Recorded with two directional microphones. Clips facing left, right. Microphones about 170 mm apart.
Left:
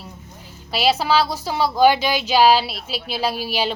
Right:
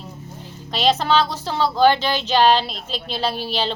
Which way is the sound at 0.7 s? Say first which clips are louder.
Even; 10° left (ahead or behind).